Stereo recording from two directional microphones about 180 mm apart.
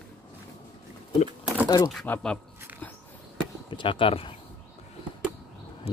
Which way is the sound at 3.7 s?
25° left (ahead or behind).